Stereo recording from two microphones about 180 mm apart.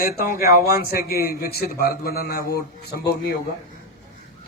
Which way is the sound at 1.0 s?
60° left (ahead or behind).